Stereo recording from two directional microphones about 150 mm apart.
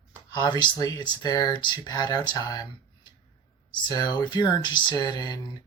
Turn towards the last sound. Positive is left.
turn(degrees=25)  # may be behind; listen again after turning